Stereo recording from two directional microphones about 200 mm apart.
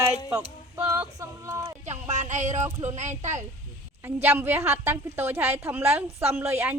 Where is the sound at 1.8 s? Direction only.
35° right (ahead or behind).